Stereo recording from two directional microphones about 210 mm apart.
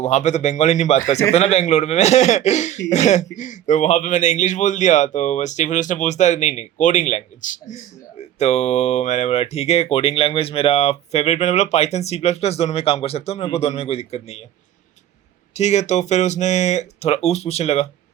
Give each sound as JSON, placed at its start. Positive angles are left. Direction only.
{"t": 0.0, "sound": "a man's voice", "side_deg": 35}
{"t": 15.5, "sound": "a man's voice", "side_deg": 35}